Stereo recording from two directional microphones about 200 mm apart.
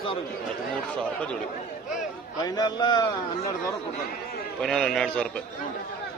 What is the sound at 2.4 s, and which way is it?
A man's voice, 20° left (ahead or behind).